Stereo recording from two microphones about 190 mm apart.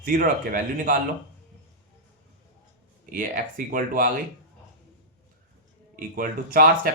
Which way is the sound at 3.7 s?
45° right (ahead or behind).